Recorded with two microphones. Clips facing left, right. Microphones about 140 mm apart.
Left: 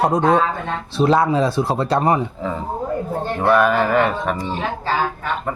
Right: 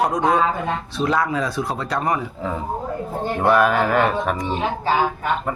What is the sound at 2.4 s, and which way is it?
A man's voice, centre (ahead or behind).